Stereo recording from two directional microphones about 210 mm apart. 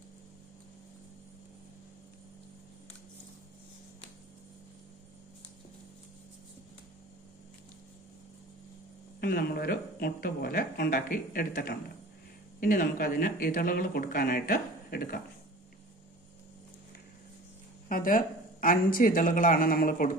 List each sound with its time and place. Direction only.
9.2 s speech: 45° left (ahead or behind)
17.8 s speech: 40° left (ahead or behind)